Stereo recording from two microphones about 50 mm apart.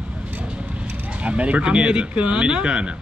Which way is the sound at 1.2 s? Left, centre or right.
Right.